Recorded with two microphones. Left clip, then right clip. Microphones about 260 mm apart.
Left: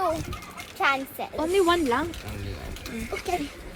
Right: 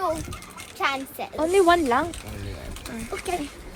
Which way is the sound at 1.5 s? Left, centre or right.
Centre.